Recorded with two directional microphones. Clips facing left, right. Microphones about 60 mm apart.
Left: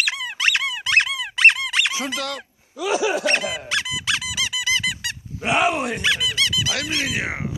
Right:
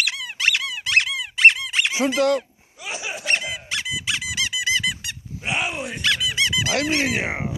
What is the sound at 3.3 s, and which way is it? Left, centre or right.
Squeak, left.